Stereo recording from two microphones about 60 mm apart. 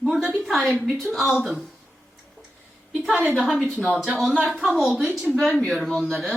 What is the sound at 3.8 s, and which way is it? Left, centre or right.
Speech, right.